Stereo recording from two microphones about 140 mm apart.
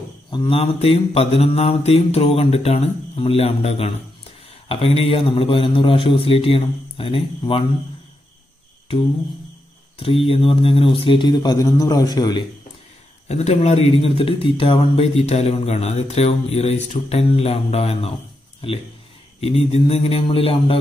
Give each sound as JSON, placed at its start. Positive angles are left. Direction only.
{"t": 0.3, "sound": "a man's voice", "side_deg": 35}
{"t": 9.9, "sound": "a man's voice", "side_deg": 40}
{"t": 13.3, "sound": "a man's voice", "side_deg": 50}